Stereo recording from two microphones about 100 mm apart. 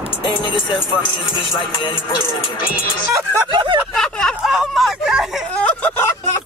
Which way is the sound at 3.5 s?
55° right (ahead or behind).